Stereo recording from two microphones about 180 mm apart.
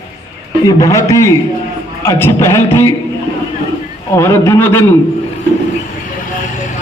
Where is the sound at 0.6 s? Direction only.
20° left (ahead or behind).